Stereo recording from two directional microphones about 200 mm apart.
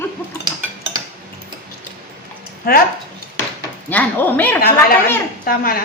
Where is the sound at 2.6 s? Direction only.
50° left (ahead or behind).